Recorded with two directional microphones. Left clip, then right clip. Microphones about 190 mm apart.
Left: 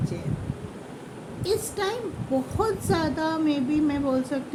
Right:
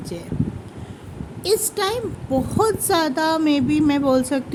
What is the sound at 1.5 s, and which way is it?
Speech, 60° right (ahead or behind).